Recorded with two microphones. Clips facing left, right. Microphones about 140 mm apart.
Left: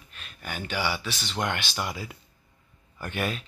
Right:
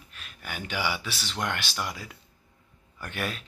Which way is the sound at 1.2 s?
Centre (ahead or behind).